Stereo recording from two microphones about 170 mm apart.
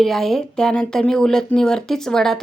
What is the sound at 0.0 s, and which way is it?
Speech, centre (ahead or behind).